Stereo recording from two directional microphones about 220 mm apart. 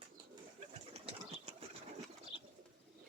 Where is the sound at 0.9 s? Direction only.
30° right (ahead or behind).